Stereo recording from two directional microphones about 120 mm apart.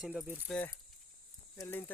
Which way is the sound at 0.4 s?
15° left (ahead or behind).